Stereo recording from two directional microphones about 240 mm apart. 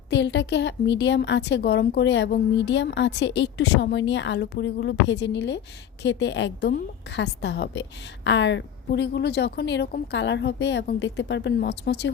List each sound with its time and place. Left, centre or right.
0.1 s a woman's voice: left